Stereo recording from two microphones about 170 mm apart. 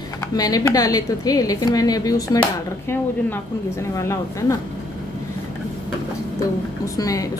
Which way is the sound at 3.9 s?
15° left (ahead or behind).